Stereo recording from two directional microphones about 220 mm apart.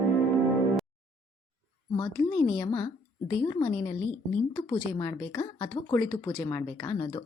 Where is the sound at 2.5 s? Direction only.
20° left (ahead or behind).